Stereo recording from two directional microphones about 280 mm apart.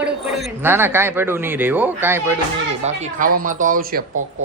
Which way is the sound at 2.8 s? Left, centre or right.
Right.